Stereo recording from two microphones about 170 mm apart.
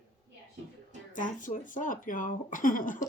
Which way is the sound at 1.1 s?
50° left (ahead or behind).